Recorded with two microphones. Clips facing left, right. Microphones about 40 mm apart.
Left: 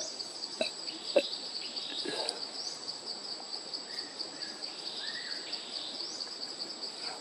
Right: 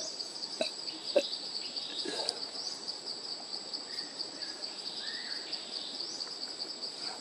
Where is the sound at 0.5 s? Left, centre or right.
Centre.